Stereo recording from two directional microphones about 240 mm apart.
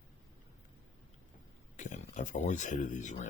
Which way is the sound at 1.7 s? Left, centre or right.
Left.